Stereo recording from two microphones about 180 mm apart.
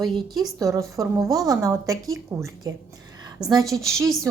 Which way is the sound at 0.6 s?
15° right (ahead or behind).